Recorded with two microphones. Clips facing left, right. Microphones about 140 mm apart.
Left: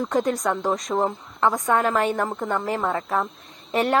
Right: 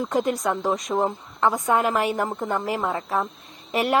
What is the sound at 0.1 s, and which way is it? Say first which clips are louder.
A woman's voice: even; 5° right (ahead or behind).